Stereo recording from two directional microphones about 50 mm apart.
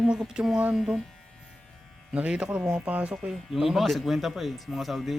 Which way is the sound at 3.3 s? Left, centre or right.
Centre.